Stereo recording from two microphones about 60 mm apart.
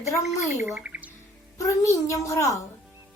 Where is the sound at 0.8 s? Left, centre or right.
Right.